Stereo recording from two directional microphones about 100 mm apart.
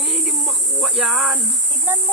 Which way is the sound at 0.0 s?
Centre (ahead or behind).